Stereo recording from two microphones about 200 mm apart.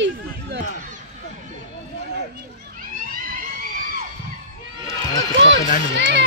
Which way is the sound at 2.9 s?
45° right (ahead or behind).